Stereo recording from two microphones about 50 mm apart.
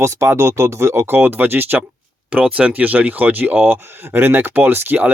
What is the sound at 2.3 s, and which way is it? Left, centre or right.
Speech, right.